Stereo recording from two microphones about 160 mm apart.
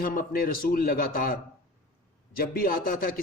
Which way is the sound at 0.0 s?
65° left (ahead or behind).